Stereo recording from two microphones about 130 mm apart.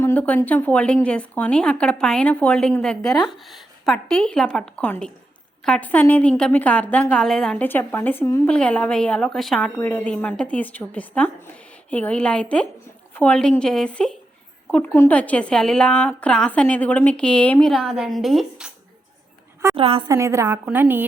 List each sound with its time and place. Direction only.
0.0 s a woman's voice: 15° left (ahead or behind)
7.6 s a woman's voice: 15° left (ahead or behind)
9.6 s a woman's voice: 15° left (ahead or behind); by 18.7 s 5° right (ahead or behind)
19.7 s a woman's voice: 45° right (ahead or behind)
20.1 s a woman's voice: 20° right (ahead or behind)